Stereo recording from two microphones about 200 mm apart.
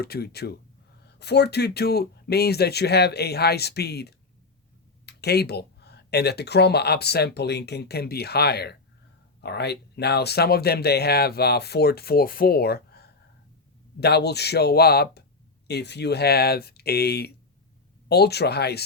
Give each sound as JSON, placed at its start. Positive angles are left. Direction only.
{"t": 0.0, "sound": "speech", "side_deg": 50}